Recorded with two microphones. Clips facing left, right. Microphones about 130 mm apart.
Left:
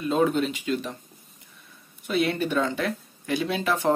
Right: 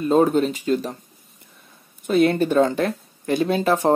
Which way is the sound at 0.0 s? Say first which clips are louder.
Right 6 dB; 40° right (ahead or behind).